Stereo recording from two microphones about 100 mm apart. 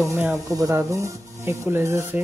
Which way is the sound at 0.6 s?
25° right (ahead or behind).